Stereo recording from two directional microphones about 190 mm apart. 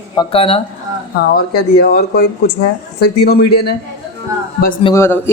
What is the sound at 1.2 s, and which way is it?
Speech, 55° left (ahead or behind).